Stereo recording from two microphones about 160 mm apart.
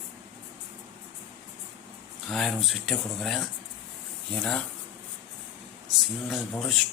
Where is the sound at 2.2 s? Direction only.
Centre (ahead or behind).